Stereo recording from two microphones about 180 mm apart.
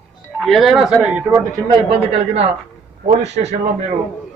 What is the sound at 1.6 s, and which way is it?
A man's voice, 30° right (ahead or behind).